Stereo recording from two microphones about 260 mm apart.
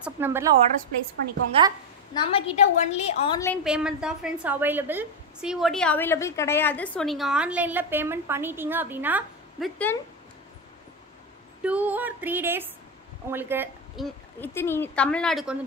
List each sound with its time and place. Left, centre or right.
0.0 s music: centre
1.6 s a woman's voice: right
2.1 s a woman's voice: left
3.6 s a woman's voice: centre
9.9 s speech: centre
11.6 s music: centre
13.3 s a woman's voice: centre